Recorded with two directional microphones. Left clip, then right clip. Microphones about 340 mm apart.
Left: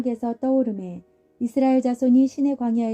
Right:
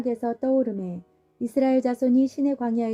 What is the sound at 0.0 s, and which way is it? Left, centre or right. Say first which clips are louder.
Speech: even; centre.